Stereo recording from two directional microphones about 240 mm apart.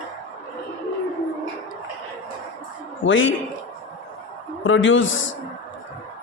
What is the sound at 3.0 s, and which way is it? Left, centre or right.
Speech, left.